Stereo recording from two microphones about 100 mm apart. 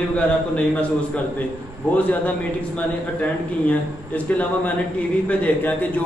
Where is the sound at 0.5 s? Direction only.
15° left (ahead or behind).